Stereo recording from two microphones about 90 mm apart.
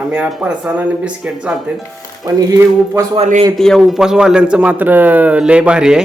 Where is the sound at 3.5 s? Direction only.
5° left (ahead or behind).